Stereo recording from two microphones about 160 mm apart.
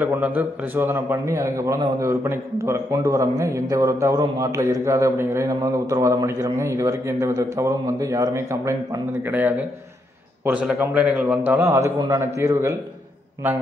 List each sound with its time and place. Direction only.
0.0 s a man's voice: 10° right (ahead or behind)